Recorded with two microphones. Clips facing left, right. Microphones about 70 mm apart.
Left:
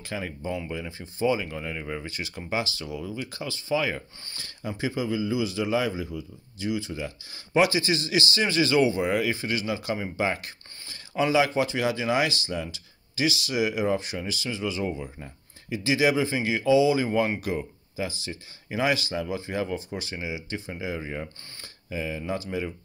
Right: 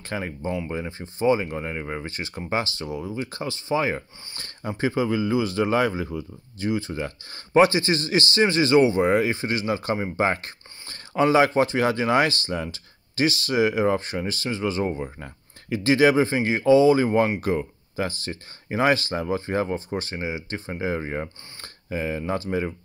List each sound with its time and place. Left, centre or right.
0.1 s speech: right